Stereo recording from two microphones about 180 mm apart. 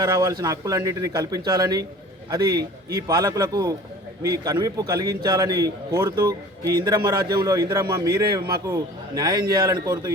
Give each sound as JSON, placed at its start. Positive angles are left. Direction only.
{"t": 0.0, "sound": "a man's voice", "side_deg": -20}